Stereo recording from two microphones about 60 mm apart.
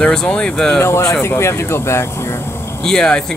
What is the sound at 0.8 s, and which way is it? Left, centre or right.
Speech, left.